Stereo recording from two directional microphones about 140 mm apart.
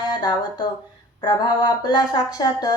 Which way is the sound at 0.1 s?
30° left (ahead or behind).